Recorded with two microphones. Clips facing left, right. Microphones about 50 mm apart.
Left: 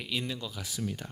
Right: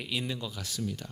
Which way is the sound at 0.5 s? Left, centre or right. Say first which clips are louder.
Even; centre.